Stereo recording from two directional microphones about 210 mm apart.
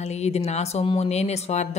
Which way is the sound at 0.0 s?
30° left (ahead or behind).